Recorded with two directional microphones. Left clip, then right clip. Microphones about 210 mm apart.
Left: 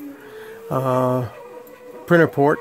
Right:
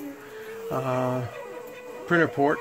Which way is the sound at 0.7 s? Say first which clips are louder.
Left 7 dB; 55° left (ahead or behind).